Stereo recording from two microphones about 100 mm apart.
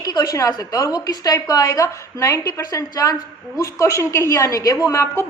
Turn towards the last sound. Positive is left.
turn(degrees=30)  # may be behind; listen again after turning